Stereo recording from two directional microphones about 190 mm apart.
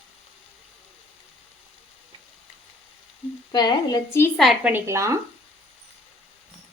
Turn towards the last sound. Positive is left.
turn(degrees=-15)  # may be behind; listen again after turning